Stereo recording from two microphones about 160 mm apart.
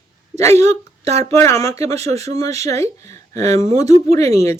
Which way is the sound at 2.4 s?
20° left (ahead or behind).